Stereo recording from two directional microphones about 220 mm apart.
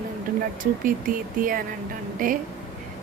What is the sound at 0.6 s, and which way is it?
A woman's voice, 40° right (ahead or behind).